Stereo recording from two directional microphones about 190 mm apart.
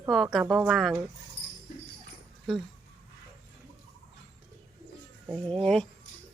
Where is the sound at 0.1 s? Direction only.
Centre (ahead or behind).